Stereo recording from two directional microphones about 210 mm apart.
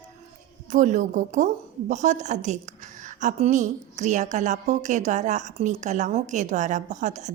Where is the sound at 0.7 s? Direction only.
35° right (ahead or behind).